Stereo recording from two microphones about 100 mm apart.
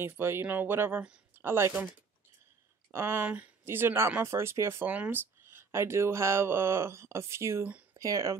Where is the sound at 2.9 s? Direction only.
25° right (ahead or behind).